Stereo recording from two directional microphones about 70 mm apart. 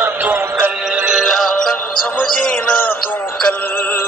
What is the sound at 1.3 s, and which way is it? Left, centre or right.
Music, centre.